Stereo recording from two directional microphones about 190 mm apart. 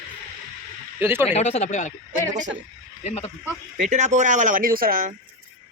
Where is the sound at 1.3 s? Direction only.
35° left (ahead or behind).